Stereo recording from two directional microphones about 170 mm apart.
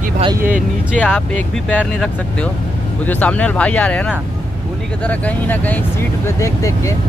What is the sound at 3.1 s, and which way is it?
Speech, 10° left (ahead or behind).